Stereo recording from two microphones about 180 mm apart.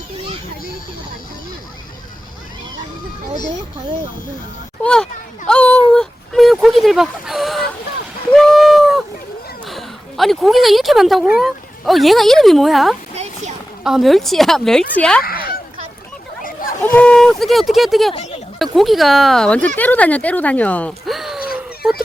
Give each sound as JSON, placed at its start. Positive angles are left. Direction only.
{"t": 4.8, "sound": "speech", "side_deg": 5}
{"t": 5.9, "sound": "a sound", "side_deg": 0}
{"t": 9.6, "sound": "a woman's voice", "side_deg": 0}
{"t": 15.2, "sound": "a sound", "side_deg": 55}
{"t": 16.8, "sound": "speech", "side_deg": 10}
{"t": 18.1, "sound": "speech", "side_deg": 35}
{"t": 18.6, "sound": "speech", "side_deg": 0}